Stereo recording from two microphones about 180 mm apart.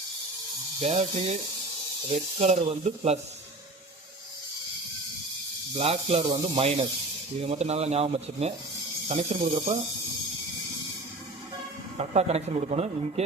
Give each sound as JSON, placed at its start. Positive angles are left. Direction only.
{"t": 0.8, "sound": "speech", "side_deg": -40}
{"t": 5.7, "sound": "speech", "side_deg": -30}
{"t": 11.9, "sound": "speech", "side_deg": -35}